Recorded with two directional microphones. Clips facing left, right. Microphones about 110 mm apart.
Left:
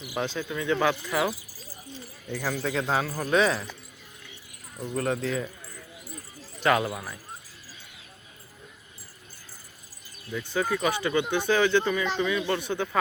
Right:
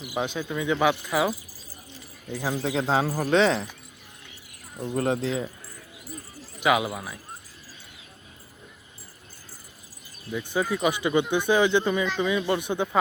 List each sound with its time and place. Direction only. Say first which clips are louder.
0.0 s a man's voice: right 2 dB; 10° right (ahead or behind); by 3.7 s 30° right (ahead or behind)
4.9 s a man's voice: right 2 dB; 30° right (ahead or behind)
6.6 s speech: right 1 dB; 5° right (ahead or behind)
10.3 s speech: right 1 dB; 15° right (ahead or behind)